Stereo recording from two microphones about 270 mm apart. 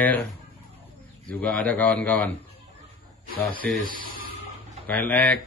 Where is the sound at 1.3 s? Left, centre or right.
Centre.